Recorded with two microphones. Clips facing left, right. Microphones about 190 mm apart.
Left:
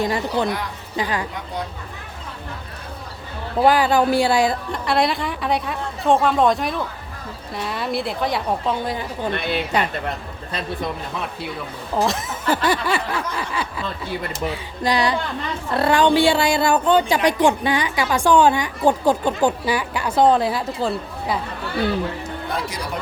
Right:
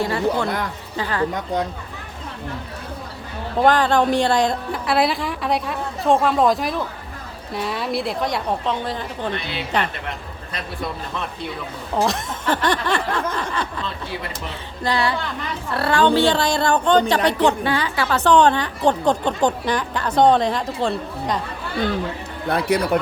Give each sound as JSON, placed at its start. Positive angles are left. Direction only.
{"t": 0.0, "sound": "a woman's voice", "side_deg": 15}
{"t": 3.6, "sound": "a woman's voice", "side_deg": 10}
{"t": 9.3, "sound": "speech", "side_deg": 55}
{"t": 11.9, "sound": "a woman's voice", "side_deg": 0}
{"t": 22.4, "sound": "speech", "side_deg": -60}